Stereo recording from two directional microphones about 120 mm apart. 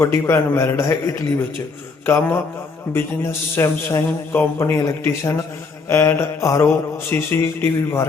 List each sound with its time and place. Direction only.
0.0 s mantra: 20° left (ahead or behind)
3.5 s mantra: 20° left (ahead or behind)